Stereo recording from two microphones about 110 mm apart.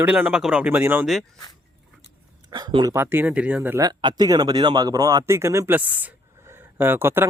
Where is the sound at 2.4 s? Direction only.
40° right (ahead or behind).